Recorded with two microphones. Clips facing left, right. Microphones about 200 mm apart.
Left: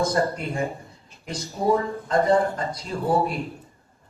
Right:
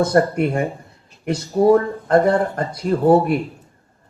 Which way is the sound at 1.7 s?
65° right (ahead or behind).